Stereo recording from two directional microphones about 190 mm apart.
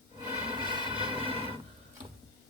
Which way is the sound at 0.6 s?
25° right (ahead or behind).